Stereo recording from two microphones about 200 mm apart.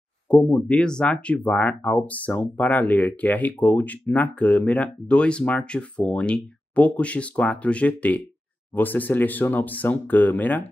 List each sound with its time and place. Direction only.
0.3 s speech: 5° left (ahead or behind)